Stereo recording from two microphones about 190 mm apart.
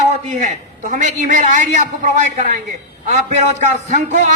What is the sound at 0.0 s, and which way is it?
A man's voice, 40° right (ahead or behind).